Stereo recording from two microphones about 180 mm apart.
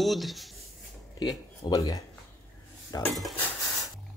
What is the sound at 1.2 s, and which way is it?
Speech, 20° left (ahead or behind).